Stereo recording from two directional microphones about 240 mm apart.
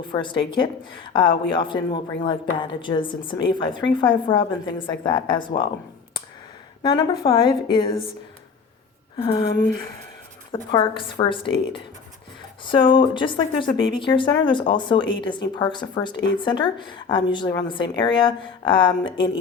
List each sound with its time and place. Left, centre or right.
0.1 s a woman's voice: centre
6.8 s a woman's voice: centre
9.1 s a woman's voice: centre